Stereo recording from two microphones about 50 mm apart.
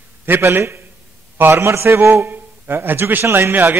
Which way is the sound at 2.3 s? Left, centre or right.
Right.